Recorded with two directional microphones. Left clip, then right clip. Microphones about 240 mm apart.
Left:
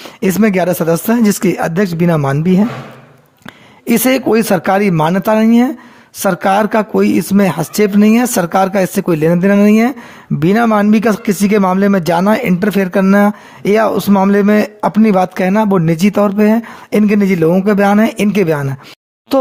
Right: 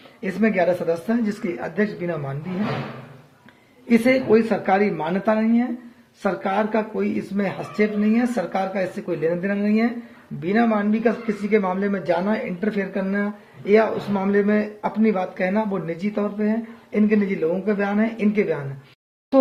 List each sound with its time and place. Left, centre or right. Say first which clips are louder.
0.2 s speech: left 8 dB; left
3.8 s speech: left 6 dB; left